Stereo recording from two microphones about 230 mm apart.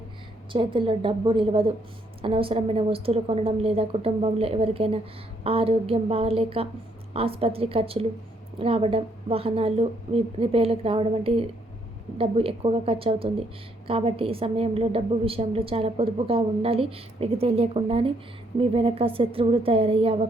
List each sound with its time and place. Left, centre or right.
0.5 s a woman's voice: right